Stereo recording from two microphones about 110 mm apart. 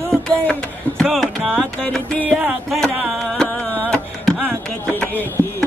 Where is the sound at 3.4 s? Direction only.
10° left (ahead or behind).